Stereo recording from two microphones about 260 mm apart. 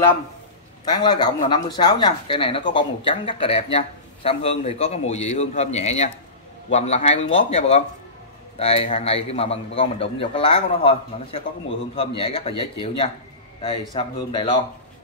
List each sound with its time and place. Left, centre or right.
0.8 s a man's voice: centre